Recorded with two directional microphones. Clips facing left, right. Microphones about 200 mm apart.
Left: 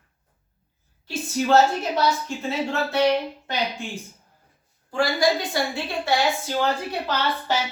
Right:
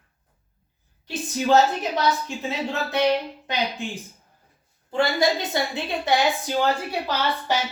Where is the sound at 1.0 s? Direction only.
15° right (ahead or behind).